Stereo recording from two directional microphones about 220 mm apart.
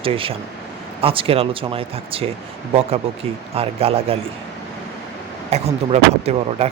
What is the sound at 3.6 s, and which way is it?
Speech, 25° right (ahead or behind).